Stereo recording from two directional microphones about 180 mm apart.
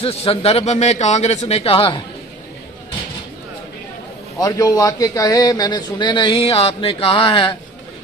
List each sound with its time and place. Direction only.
0.0 s a man's voice: 35° left (ahead or behind)
4.4 s a man's voice: 20° left (ahead or behind)